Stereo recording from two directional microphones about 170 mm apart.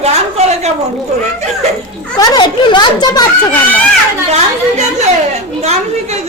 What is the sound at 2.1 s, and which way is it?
A child's voice, 25° left (ahead or behind).